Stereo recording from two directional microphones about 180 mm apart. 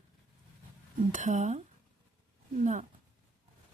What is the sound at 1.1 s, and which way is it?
Speech, 45° right (ahead or behind).